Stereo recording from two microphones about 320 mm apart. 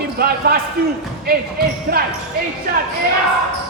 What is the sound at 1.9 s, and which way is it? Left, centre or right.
Speech, right.